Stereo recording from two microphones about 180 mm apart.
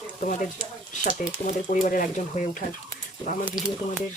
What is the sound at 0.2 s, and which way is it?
Speech, 45° left (ahead or behind).